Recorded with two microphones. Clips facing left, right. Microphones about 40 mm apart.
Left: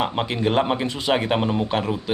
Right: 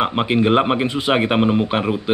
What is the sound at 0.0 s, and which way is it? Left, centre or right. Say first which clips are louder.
Speech: right 5 dB; right.